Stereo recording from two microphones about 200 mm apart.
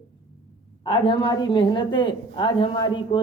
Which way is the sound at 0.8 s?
25° left (ahead or behind).